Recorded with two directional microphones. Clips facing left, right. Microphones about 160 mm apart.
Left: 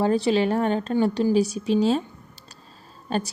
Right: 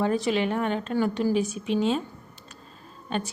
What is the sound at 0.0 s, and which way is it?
A woman's voice, 30° left (ahead or behind).